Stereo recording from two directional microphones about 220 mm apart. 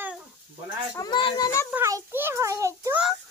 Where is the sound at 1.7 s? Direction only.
10° right (ahead or behind).